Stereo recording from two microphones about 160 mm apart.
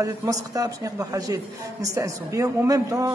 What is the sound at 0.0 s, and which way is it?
A man's voice, 20° right (ahead or behind).